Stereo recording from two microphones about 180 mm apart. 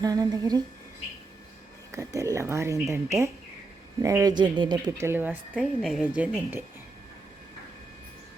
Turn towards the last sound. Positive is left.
turn(degrees=-5)  # may be behind; listen again after turning